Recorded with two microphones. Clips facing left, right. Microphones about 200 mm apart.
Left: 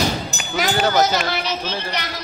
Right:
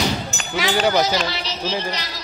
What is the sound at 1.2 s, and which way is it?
Speech, 55° left (ahead or behind).